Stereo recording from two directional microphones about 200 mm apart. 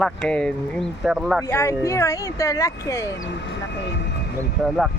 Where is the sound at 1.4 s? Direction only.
15° left (ahead or behind).